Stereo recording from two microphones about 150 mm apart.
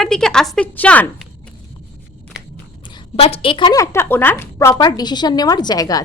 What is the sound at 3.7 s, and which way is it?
A woman's voice, 20° left (ahead or behind).